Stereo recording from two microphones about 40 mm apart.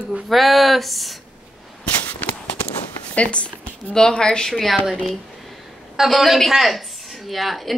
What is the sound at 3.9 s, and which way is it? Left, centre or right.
Speech, centre.